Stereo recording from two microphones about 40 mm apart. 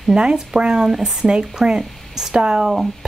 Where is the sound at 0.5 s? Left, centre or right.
Right.